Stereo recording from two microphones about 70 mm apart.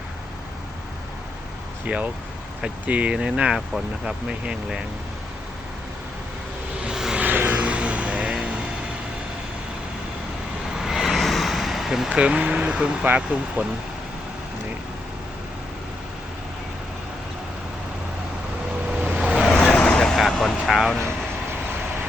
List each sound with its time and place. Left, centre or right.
2.6 s speech: centre
6.8 s vehicle: centre
7.2 s vehicle: right
10.8 s vehicle: centre
13.1 s speech: centre
19.0 s vehicle: centre
19.5 s vehicle: centre
19.7 s vehicle: centre
20.0 s vehicle: centre